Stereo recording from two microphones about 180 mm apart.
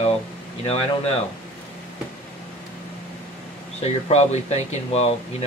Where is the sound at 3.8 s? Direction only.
35° left (ahead or behind).